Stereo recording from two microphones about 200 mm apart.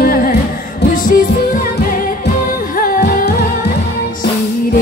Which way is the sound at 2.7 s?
45° left (ahead or behind).